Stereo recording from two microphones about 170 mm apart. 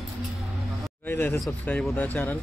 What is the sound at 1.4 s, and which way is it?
Speech, centre (ahead or behind).